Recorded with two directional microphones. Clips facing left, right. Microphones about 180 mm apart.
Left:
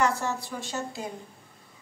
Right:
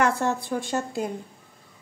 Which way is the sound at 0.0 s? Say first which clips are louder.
Right 3 dB; 55° right (ahead or behind).